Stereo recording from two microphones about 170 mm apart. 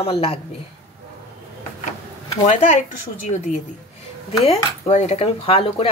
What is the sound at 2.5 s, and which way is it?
Speech, 40° left (ahead or behind).